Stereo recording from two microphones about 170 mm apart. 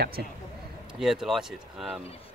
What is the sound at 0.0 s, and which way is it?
Speech, 65° right (ahead or behind).